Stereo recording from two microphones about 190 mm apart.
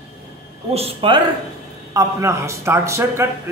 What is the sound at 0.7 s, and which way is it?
Speech, 30° right (ahead or behind).